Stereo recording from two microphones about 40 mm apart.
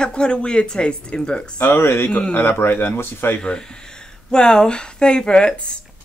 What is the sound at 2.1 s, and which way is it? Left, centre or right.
Speech, left.